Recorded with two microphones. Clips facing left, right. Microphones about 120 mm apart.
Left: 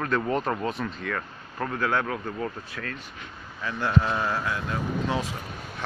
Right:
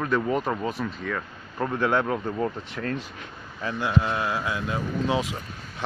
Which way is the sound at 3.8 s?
5° right (ahead or behind).